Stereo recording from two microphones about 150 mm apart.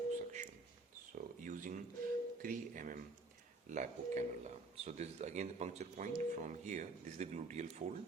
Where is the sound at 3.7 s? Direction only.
55° right (ahead or behind).